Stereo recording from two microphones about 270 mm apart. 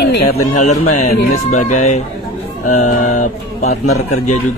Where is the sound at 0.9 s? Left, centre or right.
Left.